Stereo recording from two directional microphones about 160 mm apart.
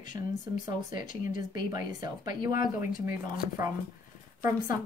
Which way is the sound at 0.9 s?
55° left (ahead or behind).